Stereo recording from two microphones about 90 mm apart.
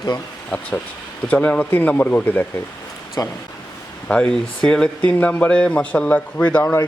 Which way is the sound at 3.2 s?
40° left (ahead or behind).